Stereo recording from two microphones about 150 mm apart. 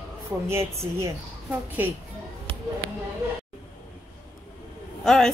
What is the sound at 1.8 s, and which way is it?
Speech, 10° right (ahead or behind).